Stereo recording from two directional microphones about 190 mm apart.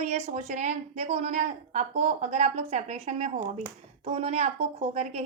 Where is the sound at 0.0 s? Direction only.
35° right (ahead or behind).